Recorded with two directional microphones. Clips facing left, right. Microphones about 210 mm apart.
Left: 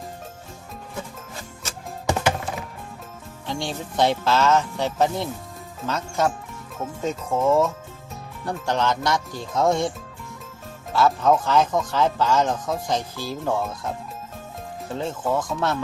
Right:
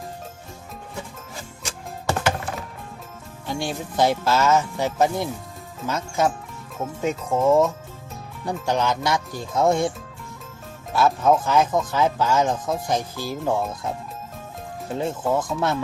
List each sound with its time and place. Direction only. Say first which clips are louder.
2.0 s music: left 1 dB; 15° left (ahead or behind)
3.4 s speech: right 1 dB; 5° right (ahead or behind)
7.2 s speech: right 2 dB; centre (ahead or behind)
10.9 s speech: even; 5° right (ahead or behind)
13.4 s speech: right 1 dB; 5° right (ahead or behind)
14.9 s speech: right 2 dB; 10° right (ahead or behind)